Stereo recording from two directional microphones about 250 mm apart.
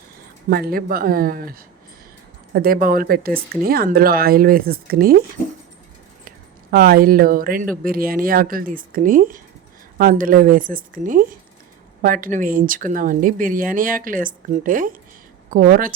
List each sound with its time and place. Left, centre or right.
0.5 s speech: right
6.2 s speech: right